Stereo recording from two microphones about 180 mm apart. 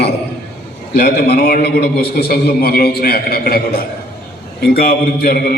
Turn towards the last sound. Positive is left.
turn(degrees=55)  # may be behind; listen again after turning